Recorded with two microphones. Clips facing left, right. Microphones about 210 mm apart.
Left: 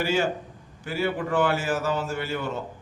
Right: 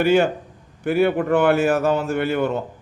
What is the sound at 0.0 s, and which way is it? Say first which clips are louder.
A man's voice: right 8 dB; 60° right (ahead or behind).